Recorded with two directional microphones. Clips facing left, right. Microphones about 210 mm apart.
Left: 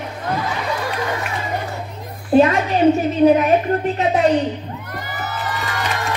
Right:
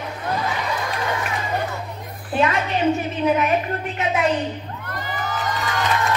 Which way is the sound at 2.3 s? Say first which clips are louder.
Left 7 dB; 40° left (ahead or behind).